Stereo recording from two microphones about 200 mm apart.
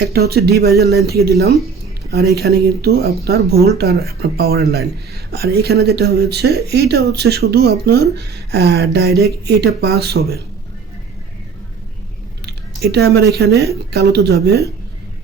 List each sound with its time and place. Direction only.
0.0 s speech: 50° right (ahead or behind)
12.5 s a sound: 55° right (ahead or behind)
13.3 s speech: 55° right (ahead or behind)